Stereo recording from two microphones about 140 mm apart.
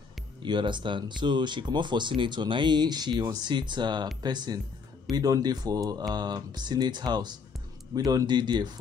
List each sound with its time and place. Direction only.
0.4 s speech: 35° right (ahead or behind)